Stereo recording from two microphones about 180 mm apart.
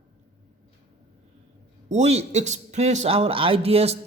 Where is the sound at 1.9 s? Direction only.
40° right (ahead or behind).